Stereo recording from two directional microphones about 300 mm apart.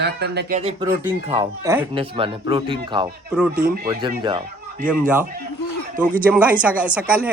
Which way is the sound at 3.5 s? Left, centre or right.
Right.